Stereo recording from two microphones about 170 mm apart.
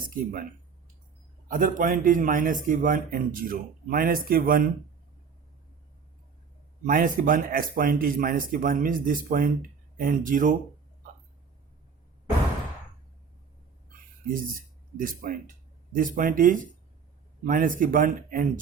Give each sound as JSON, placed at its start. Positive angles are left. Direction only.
{"t": 0.1, "sound": "speech", "side_deg": -55}
{"t": 1.5, "sound": "speech", "side_deg": -50}
{"t": 6.8, "sound": "speech", "side_deg": -55}
{"t": 14.9, "sound": "speech", "side_deg": -55}